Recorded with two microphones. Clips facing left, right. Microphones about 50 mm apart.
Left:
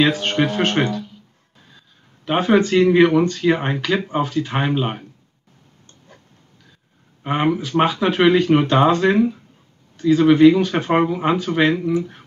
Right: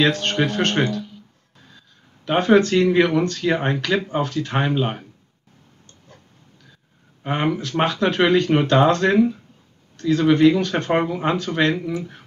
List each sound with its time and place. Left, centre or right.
0.0 s speech: centre
2.2 s speech: centre
7.2 s speech: centre